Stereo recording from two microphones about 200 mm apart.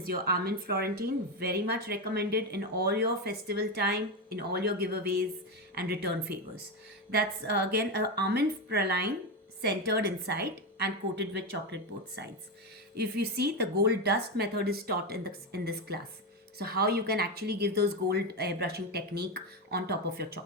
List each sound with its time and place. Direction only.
0.0 s a woman's voice: 50° right (ahead or behind)